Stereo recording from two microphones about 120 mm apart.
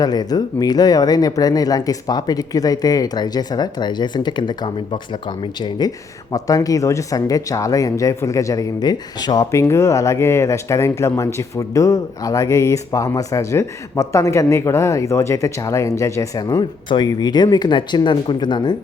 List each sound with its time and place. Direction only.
0.0 s speech: 35° left (ahead or behind)